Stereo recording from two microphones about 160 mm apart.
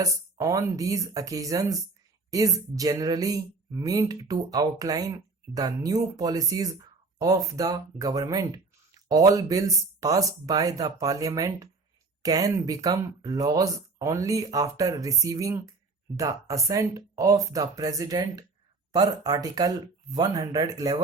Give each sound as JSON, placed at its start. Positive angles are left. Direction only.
{"t": 0.0, "sound": "speech", "side_deg": -20}